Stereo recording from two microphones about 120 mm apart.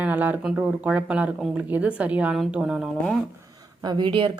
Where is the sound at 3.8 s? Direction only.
40° right (ahead or behind).